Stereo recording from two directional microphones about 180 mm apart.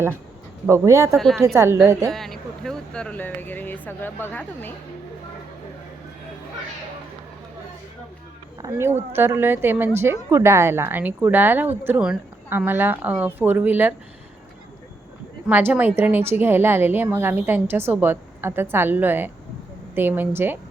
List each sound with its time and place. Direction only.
0.7 s a woman's voice: 15° right (ahead or behind)
2.0 s speech: centre (ahead or behind)
8.6 s a woman's voice: 20° right (ahead or behind)
15.4 s a woman's voice: 10° right (ahead or behind)